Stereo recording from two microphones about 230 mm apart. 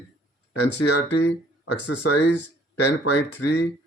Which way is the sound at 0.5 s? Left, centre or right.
Left.